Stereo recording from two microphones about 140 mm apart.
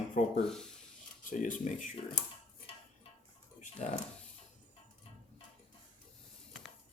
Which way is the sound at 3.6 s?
60° left (ahead or behind).